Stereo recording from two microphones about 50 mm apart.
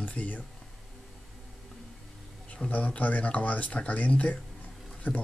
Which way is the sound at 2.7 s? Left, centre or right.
Left.